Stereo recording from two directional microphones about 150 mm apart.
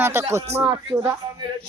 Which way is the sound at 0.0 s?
15° right (ahead or behind).